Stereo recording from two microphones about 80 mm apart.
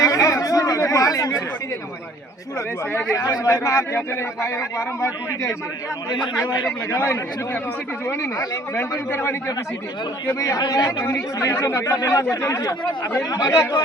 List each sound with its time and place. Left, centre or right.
0.0 s chatter: left
3.2 s a man's voice: left
6.7 s a man's voice: left
10.2 s speech: left
11.0 s speech: left